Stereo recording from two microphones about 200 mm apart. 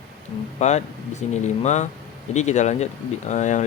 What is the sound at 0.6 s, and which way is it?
Speech, 35° left (ahead or behind).